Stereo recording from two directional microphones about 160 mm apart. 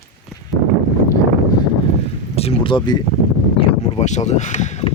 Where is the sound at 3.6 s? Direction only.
45° left (ahead or behind).